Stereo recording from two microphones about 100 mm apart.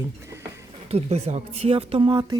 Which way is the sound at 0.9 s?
90° right.